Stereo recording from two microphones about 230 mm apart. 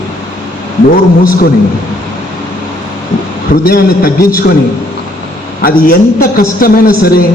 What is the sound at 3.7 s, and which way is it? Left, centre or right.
Speech, left.